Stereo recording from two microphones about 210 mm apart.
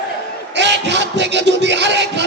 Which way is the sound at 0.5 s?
55° right (ahead or behind).